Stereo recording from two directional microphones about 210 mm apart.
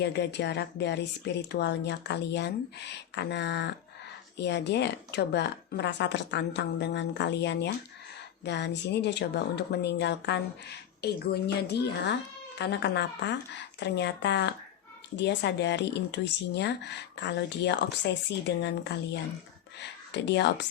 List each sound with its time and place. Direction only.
0.0 s speech: 55° left (ahead or behind)